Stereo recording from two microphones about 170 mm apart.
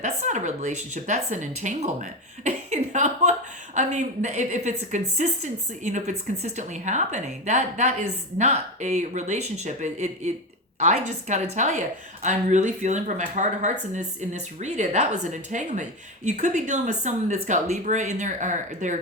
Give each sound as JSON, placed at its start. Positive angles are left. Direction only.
{"t": 0.0, "sound": "speech", "side_deg": -45}